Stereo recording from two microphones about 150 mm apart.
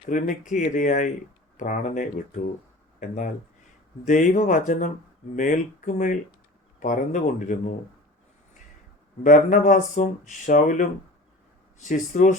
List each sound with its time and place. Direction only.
0.1 s speech: 60° left (ahead or behind)
9.2 s speech: 60° left (ahead or behind)